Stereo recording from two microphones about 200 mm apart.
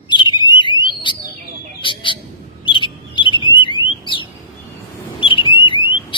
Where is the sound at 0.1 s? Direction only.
25° left (ahead or behind).